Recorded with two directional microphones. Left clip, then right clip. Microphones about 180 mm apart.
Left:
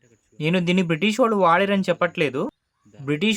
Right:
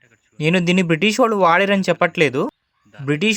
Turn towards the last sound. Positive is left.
turn(degrees=-20)  # may be behind; listen again after turning